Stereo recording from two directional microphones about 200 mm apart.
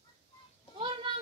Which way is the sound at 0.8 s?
25° right (ahead or behind).